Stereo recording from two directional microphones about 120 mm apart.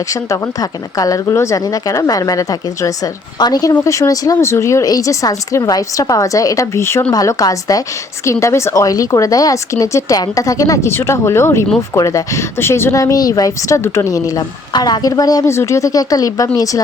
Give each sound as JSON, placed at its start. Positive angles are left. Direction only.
{"t": 0.1, "sound": "a woman's voice", "side_deg": 25}